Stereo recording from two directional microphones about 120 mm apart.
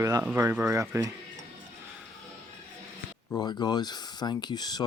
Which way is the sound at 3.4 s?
35° left (ahead or behind).